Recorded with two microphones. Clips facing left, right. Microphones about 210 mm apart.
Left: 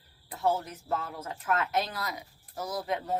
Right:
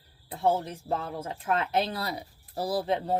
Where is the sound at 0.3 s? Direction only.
30° right (ahead or behind).